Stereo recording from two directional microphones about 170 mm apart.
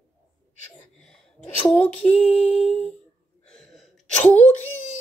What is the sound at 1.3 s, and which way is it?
Speech, 35° left (ahead or behind).